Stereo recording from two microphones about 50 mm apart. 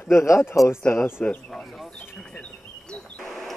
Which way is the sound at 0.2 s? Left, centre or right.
Left.